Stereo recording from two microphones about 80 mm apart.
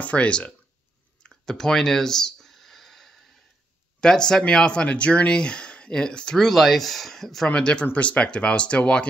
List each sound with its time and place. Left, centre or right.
0.0 s speech: centre
1.3 s a sound: centre
4.0 s speech: centre